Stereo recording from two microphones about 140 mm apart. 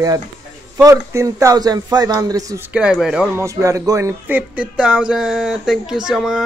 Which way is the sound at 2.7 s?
5° right (ahead or behind).